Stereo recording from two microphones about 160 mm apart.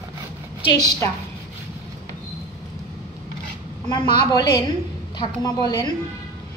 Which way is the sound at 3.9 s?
30° left (ahead or behind).